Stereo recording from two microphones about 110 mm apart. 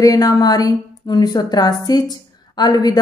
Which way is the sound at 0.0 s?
35° left (ahead or behind).